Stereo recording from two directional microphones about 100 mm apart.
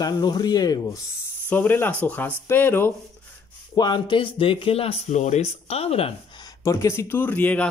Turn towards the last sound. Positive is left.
turn(degrees=15)  # may be behind; listen again after turning